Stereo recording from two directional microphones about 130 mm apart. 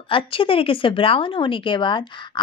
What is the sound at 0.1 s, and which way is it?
Speech, 45° left (ahead or behind).